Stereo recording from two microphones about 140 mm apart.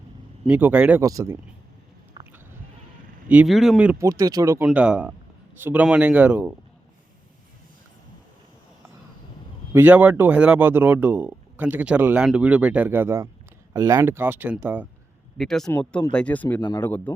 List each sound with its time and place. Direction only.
0.4 s speech: 10° right (ahead or behind)
2.2 s a sound: 30° right (ahead or behind)
3.2 s speech: 10° right (ahead or behind)
3.9 s speech: 25° right (ahead or behind)
4.6 s speech: 10° right (ahead or behind)
9.7 s speech: 10° right (ahead or behind)
15.4 s speech: 5° left (ahead or behind)
16.6 s speech: 30° left (ahead or behind)
16.8 s speech: 15° left (ahead or behind)